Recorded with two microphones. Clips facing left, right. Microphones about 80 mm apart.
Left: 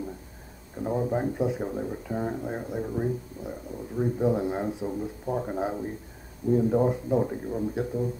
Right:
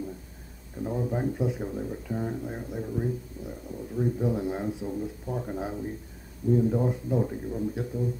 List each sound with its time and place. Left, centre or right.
0.7 s speech: left